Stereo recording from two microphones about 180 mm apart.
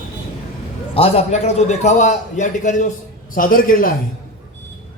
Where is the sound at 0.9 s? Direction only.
35° left (ahead or behind); by 3.9 s 50° left (ahead or behind).